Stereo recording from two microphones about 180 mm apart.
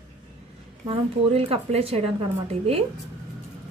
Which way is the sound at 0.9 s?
30° right (ahead or behind).